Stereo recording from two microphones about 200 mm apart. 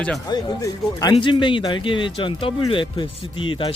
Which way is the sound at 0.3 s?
20° left (ahead or behind).